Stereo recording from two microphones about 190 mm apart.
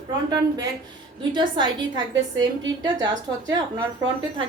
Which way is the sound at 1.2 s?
25° right (ahead or behind).